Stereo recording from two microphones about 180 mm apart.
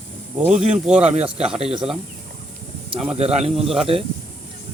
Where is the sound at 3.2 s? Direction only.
35° right (ahead or behind).